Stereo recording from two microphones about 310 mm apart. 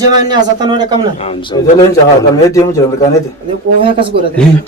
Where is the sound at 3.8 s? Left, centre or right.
Centre.